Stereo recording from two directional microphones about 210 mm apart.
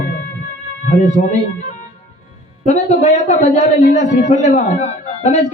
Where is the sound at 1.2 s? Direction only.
35° left (ahead or behind).